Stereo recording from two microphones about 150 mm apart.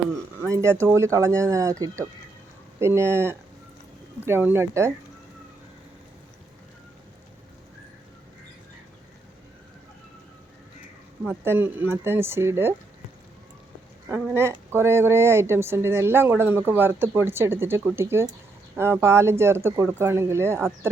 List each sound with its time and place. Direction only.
0.4 s speech: 20° right (ahead or behind)
2.7 s a woman's voice: 15° right (ahead or behind)
11.2 s a woman's voice: 15° right (ahead or behind)
14.1 s a woman's voice: 15° right (ahead or behind)